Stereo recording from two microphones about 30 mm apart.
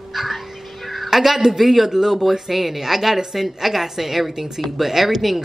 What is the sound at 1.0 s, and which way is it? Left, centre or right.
A woman's voice, centre.